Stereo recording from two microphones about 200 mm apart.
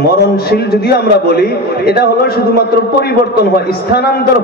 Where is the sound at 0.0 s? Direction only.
50° left (ahead or behind).